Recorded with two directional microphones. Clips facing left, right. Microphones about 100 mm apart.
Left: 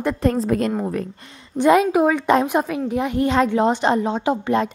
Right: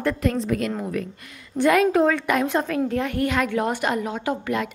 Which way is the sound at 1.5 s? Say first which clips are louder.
Left 3 dB; 20° left (ahead or behind).